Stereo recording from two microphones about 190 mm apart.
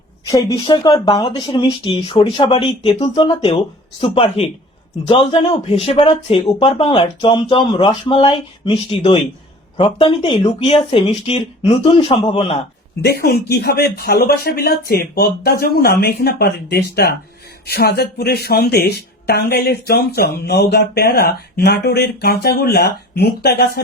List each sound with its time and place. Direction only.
0.3 s speech: 20° left (ahead or behind)
13.0 s speech: 55° left (ahead or behind)